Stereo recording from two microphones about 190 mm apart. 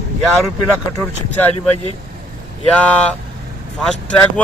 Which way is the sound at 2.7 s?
5° left (ahead or behind).